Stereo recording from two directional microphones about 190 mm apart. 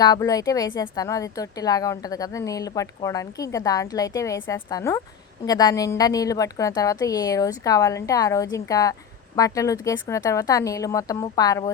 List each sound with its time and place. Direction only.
0.0 s a woman's voice: 20° left (ahead or behind)